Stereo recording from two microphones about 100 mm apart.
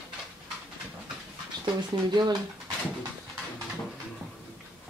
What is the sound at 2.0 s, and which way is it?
Speech, 45° right (ahead or behind).